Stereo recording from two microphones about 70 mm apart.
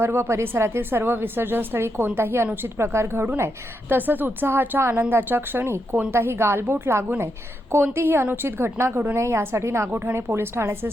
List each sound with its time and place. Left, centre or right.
0.0 s a woman's voice: right